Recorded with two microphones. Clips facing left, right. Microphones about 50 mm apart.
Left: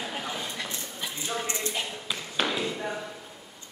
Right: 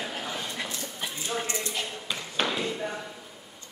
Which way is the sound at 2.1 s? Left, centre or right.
Centre.